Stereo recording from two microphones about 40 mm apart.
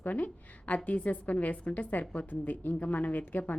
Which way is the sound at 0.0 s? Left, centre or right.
Left.